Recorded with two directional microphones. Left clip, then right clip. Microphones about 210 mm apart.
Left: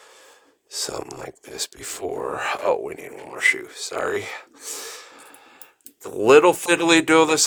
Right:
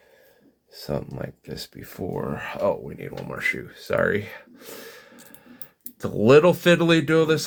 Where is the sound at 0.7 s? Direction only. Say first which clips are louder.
Left 1 dB; 40° left (ahead or behind).